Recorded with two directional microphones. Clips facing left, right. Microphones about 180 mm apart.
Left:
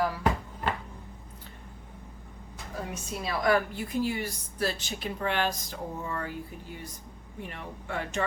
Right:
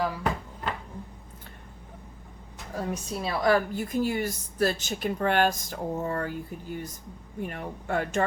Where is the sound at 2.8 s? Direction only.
35° right (ahead or behind).